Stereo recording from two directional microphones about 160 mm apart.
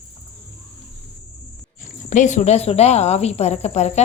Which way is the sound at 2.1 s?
50° left (ahead or behind).